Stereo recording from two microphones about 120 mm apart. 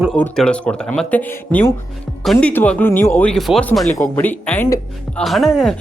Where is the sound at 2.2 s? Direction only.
Centre (ahead or behind).